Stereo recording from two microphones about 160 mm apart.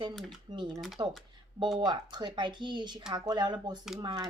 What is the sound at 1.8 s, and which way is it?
A woman's voice, 25° right (ahead or behind).